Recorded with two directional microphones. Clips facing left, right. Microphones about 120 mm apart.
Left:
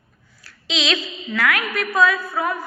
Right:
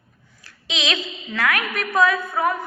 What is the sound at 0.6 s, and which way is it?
A woman's voice, 20° right (ahead or behind).